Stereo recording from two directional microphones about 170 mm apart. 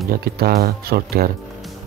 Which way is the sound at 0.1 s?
60° right (ahead or behind).